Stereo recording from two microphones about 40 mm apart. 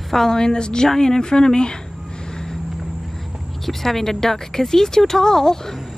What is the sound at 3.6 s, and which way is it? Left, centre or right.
Speech, centre.